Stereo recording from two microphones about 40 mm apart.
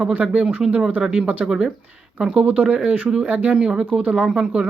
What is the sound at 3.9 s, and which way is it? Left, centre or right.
Speech, right.